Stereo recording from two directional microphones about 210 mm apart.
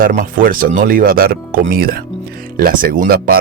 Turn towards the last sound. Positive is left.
turn(degrees=-45)  # may be behind; listen again after turning